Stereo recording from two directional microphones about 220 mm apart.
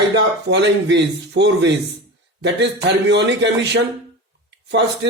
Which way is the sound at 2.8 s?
50° right (ahead or behind).